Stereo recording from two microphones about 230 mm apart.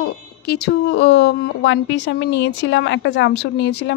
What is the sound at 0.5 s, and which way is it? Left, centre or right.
A woman's voice, left.